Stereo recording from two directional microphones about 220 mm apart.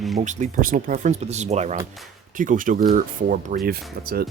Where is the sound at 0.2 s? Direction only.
30° right (ahead or behind).